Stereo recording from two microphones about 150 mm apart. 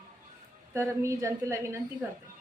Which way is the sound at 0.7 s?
20° right (ahead or behind).